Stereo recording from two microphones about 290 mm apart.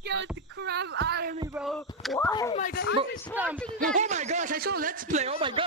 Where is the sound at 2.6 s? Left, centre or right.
Left.